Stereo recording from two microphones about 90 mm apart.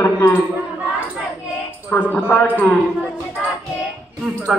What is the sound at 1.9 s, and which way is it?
Speech, 20° left (ahead or behind).